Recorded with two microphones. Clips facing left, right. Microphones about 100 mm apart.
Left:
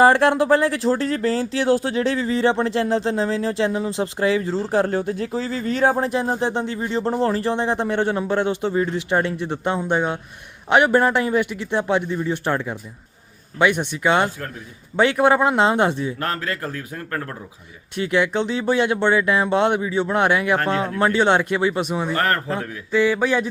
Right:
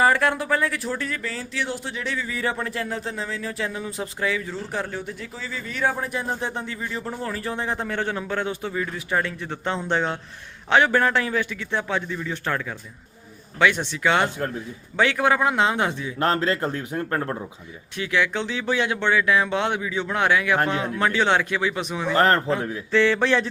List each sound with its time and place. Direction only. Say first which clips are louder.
0.0 s speech: left 6 dB; 30° left (ahead or behind)
4.9 s a man's voice: left 10 dB; 45° left (ahead or behind)
6.1 s speech: left 6 dB; 25° left (ahead or behind)
14.3 s a man's voice: right 3 dB; 20° right (ahead or behind)
14.9 s speech: left 4 dB; 20° left (ahead or behind)
16.1 s a man's voice: right 4 dB; 25° right (ahead or behind)
17.9 s speech: left 4 dB; 20° left (ahead or behind)
20.6 s speech: left 2 dB; 15° right (ahead or behind)
20.8 s speech: left 4 dB; 20° left (ahead or behind)
22.1 s a man's voice: right 5 dB; 20° right (ahead or behind)
22.9 s speech: left 1 dB; 10° left (ahead or behind)